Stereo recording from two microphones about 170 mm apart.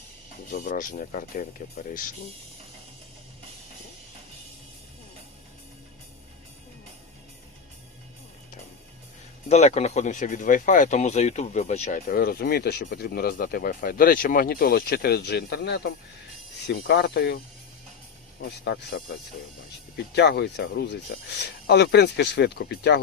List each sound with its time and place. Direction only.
0.5 s speech: 50° left (ahead or behind)
9.5 s speech: 40° left (ahead or behind); by 17.4 s 70° left (ahead or behind)
18.3 s speech: 85° left